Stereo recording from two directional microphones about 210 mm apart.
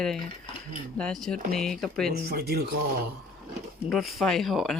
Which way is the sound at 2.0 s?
50° right (ahead or behind).